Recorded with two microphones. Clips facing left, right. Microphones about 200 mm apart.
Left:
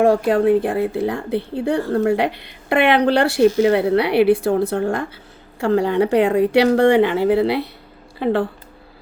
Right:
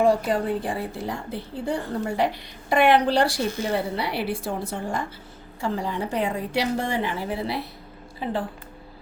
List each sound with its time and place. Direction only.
0.0 s a woman's voice: 65° left (ahead or behind)